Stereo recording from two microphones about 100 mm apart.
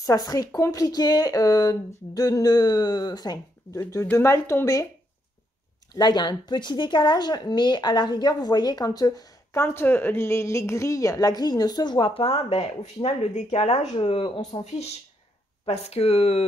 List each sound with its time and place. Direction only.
0.0 s speech: 40° left (ahead or behind)
3.9 s speech: 25° left (ahead or behind)
5.9 s speech: 45° left (ahead or behind)
12.1 s speech: 80° left
14.0 s speech: 60° left (ahead or behind)